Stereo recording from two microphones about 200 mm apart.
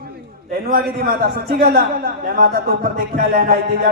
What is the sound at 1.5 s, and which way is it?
Speech, 50° right (ahead or behind).